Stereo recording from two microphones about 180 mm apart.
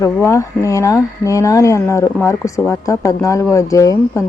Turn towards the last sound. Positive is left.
turn(degrees=20)  # may be behind; listen again after turning